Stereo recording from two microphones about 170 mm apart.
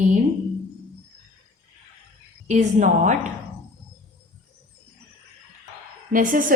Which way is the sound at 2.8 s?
45° right (ahead or behind).